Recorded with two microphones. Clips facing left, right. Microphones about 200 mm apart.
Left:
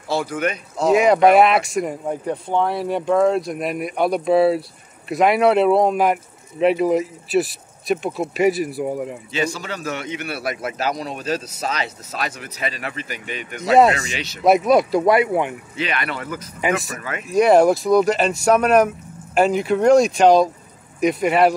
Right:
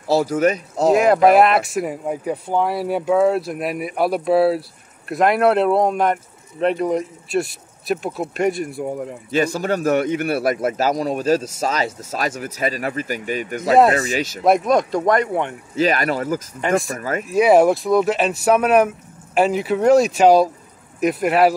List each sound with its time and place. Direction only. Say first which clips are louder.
0.1 s speech: right 6 dB; 35° right (ahead or behind)
0.9 s speech: left 1 dB; centre (ahead or behind)
9.3 s a man's voice: right 8 dB; 55° right (ahead or behind)
14.4 s speech: left 2 dB; 5° left (ahead or behind)
15.7 s speech: right 7 dB; 40° right (ahead or behind)
16.6 s speech: right 2 dB; 5° left (ahead or behind)